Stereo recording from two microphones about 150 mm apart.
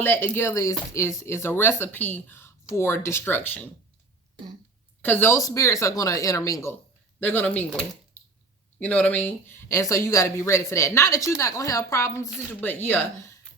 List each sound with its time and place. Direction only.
0.0 s speech: 15° left (ahead or behind)
5.0 s speech: 15° left (ahead or behind)